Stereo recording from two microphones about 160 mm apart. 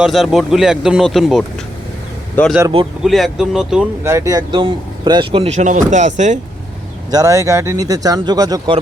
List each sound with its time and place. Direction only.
0.0 s speech: centre (ahead or behind)
2.4 s speech: 10° left (ahead or behind)
4.0 s speech: 20° right (ahead or behind); by 6.4 s 45° right (ahead or behind)
7.1 s speech: 20° right (ahead or behind)